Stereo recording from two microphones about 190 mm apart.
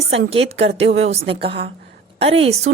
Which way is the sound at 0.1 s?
35° right (ahead or behind).